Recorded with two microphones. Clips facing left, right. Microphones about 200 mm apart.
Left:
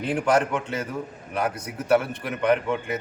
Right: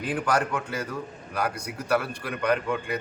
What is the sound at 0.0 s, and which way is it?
A man's voice, 25° left (ahead or behind).